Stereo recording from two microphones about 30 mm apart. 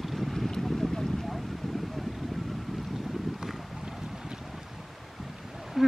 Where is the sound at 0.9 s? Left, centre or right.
Centre.